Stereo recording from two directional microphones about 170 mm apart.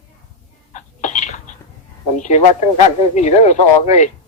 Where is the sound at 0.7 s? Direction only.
45° left (ahead or behind).